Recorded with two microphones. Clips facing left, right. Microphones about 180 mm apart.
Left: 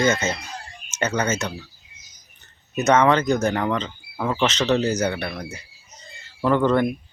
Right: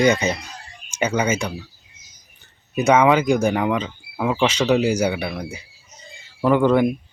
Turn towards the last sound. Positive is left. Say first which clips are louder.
# right 3 dB
turn(degrees=-10)  # may be behind; listen again after turning